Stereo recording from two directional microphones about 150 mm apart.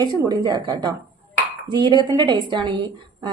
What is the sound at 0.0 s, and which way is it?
A woman's voice, 25° right (ahead or behind).